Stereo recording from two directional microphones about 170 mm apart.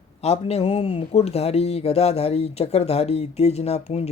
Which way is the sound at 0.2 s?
40° left (ahead or behind).